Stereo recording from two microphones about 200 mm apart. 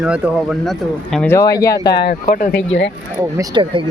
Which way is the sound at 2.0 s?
45° left (ahead or behind).